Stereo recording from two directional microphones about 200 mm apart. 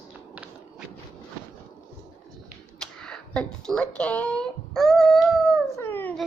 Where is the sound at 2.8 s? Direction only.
5° left (ahead or behind).